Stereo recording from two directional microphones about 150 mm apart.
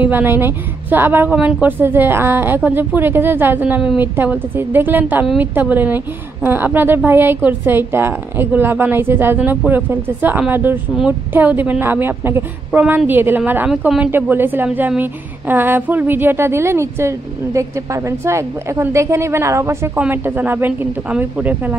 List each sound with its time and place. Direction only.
0.0 s a woman's voice: 15° right (ahead or behind)